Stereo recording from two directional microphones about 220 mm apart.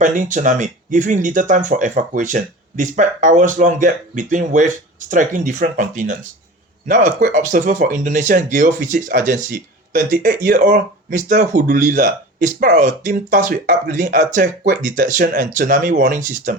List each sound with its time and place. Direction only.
0.0 s speech: 35° right (ahead or behind)